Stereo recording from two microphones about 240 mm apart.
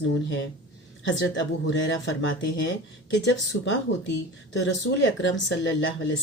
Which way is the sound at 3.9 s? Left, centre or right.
Left.